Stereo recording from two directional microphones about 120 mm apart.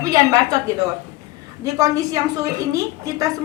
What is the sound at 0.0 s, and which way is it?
Speech, 30° right (ahead or behind).